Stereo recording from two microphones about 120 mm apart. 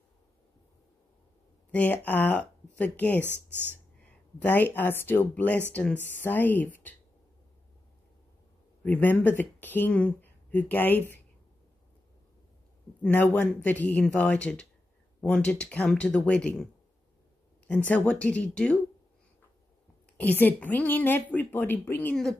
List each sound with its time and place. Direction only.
1.7 s speech: 15° left (ahead or behind)
3.3 s speech: 15° right (ahead or behind)
4.4 s speech: 15° left (ahead or behind)
8.8 s speech: 15° left (ahead or behind)
13.0 s speech: 15° left (ahead or behind)
17.6 s speech: 10° left (ahead or behind)
20.2 s speech: 10° left (ahead or behind)
22.1 s speech: centre (ahead or behind)